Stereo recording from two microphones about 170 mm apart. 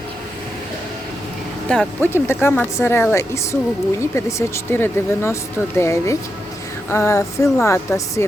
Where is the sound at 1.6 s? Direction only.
10° left (ahead or behind).